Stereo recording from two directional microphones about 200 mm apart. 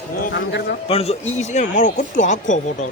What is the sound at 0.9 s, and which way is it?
Speech, 30° left (ahead or behind).